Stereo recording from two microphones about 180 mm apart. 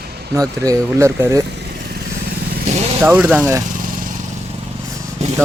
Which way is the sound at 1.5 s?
60° right (ahead or behind).